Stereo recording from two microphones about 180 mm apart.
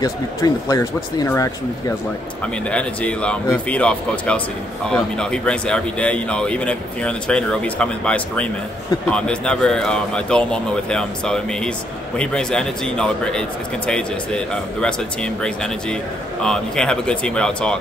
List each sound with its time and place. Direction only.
0.0 s speech: 20° left (ahead or behind)
2.7 s speech: 5° left (ahead or behind)